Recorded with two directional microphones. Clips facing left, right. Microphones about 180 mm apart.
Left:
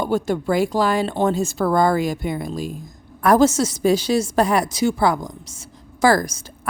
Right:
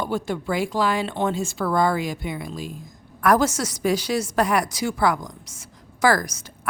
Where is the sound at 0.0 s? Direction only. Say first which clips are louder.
Left 5 dB; 45° left (ahead or behind).